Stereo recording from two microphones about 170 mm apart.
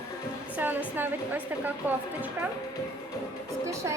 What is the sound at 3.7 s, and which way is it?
Speech, 15° right (ahead or behind).